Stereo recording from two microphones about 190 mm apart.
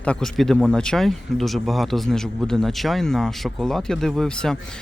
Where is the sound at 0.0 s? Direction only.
5° left (ahead or behind).